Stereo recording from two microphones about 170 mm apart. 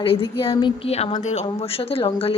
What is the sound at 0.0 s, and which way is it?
A woman's voice, 30° left (ahead or behind).